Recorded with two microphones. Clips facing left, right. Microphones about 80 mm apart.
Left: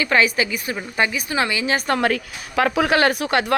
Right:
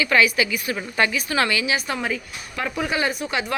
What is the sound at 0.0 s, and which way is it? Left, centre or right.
A woman's voice, left.